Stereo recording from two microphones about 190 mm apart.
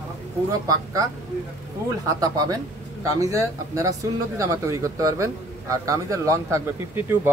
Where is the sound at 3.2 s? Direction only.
15° right (ahead or behind).